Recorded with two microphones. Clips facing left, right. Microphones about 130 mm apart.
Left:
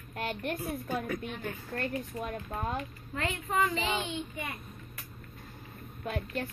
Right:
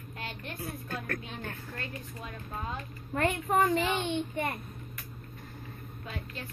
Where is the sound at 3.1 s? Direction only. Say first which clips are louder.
Right 5 dB; 50° right (ahead or behind).